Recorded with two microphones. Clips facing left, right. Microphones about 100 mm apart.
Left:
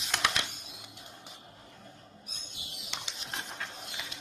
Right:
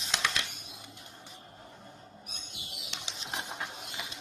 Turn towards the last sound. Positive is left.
turn(degrees=-15)  # may be behind; listen again after turning